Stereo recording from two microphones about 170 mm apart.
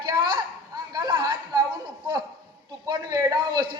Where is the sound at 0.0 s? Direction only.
25° right (ahead or behind).